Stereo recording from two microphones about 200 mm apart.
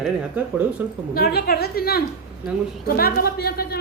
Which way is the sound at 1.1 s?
50° left (ahead or behind).